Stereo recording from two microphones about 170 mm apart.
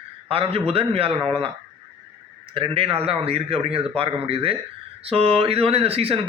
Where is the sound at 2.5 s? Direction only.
30° right (ahead or behind).